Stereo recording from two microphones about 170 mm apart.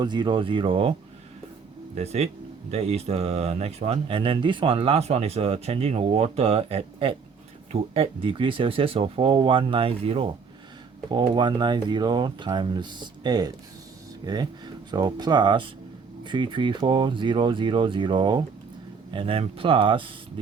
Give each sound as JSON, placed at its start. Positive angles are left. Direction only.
{"t": 0.0, "sound": "speech", "side_deg": -25}
{"t": 2.0, "sound": "speech", "side_deg": -40}